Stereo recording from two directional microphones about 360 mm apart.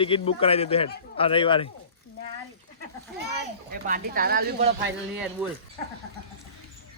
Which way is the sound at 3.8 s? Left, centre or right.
Right.